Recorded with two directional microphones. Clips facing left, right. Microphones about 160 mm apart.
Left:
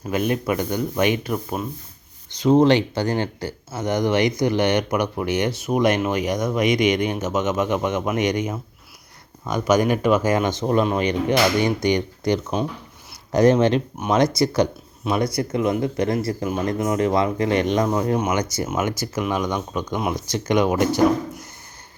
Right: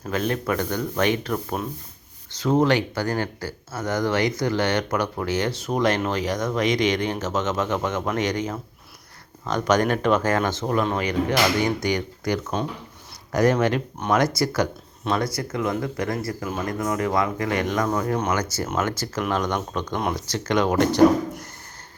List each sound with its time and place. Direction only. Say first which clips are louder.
0.1 s speech: left 2 dB; 15° left (ahead or behind)
2.3 s speech: left 4 dB; 20° left (ahead or behind)